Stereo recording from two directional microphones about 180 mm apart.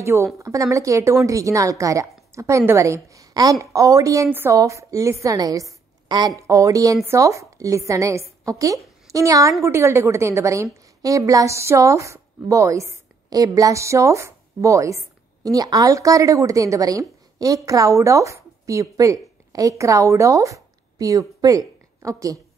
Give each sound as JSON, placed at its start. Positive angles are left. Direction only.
{"t": 0.0, "sound": "a woman's voice", "side_deg": -15}